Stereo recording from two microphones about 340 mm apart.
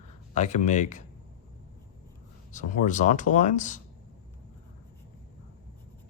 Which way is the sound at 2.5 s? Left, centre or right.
Left.